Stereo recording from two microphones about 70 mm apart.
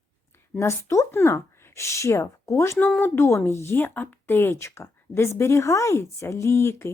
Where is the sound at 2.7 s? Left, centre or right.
Left.